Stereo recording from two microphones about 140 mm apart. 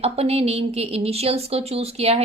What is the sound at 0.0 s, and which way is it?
A woman's voice, 45° right (ahead or behind).